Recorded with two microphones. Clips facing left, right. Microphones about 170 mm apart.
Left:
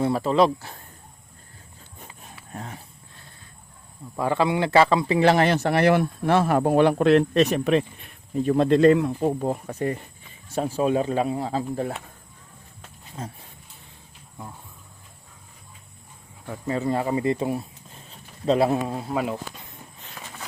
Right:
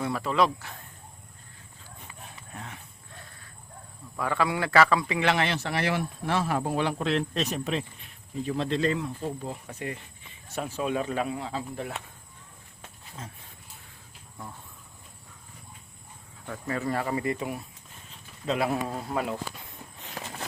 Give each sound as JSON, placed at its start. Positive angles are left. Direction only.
{"t": 0.0, "sound": "speech", "side_deg": 30}
{"t": 2.0, "sound": "horse", "side_deg": 35}
{"t": 4.2, "sound": "a man's voice", "side_deg": 25}
{"t": 16.5, "sound": "speech", "side_deg": 20}
{"t": 18.9, "sound": "speech", "side_deg": 5}